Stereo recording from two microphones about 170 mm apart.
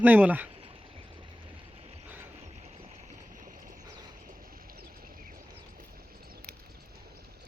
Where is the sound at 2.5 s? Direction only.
45° right (ahead or behind).